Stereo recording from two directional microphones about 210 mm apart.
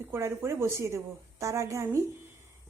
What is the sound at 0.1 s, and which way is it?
A woman's voice, 10° right (ahead or behind).